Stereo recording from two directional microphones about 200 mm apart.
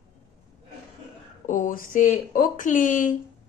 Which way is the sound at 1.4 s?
40° left (ahead or behind).